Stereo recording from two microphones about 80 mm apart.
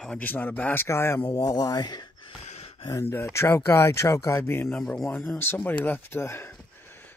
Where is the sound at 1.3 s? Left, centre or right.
Left.